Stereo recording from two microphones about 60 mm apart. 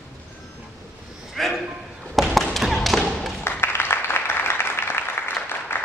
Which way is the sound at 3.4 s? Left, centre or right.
Left.